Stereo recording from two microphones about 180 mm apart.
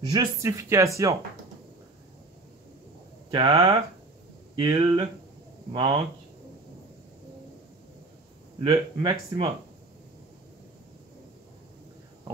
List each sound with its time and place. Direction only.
0.1 s speech: 20° right (ahead or behind)
3.3 s speech: 25° right (ahead or behind)
8.6 s speech: 25° right (ahead or behind)